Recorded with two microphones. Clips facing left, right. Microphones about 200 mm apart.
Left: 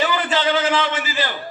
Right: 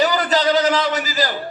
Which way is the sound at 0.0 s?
40° right (ahead or behind).